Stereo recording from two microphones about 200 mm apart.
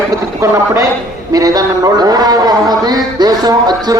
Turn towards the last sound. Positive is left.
turn(degrees=-20)  # may be behind; listen again after turning